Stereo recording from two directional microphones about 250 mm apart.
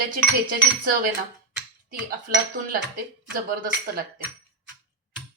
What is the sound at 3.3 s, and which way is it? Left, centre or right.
Speech, right.